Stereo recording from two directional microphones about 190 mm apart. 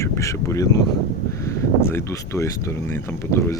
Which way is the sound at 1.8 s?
15° left (ahead or behind).